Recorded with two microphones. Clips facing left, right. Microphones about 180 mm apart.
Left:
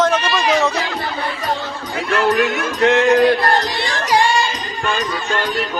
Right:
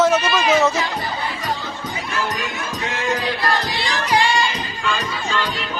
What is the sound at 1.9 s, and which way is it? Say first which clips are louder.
Speech: left 10 dB; 60° left (ahead or behind).